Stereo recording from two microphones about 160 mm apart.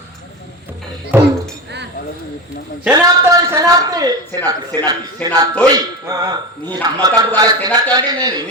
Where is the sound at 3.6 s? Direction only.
25° right (ahead or behind).